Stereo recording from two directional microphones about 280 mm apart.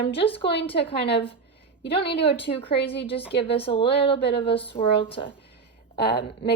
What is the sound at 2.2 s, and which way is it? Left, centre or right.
A woman's voice, centre.